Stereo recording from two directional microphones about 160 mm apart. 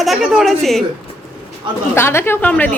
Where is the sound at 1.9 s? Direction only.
15° left (ahead or behind).